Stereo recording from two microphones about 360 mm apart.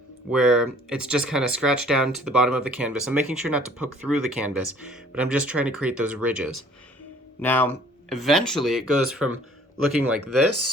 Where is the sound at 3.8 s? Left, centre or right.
Right.